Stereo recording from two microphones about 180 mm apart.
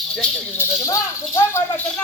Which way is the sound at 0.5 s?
15° left (ahead or behind).